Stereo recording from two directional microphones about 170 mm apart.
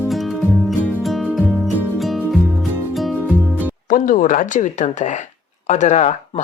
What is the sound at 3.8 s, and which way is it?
Speech, 50° left (ahead or behind).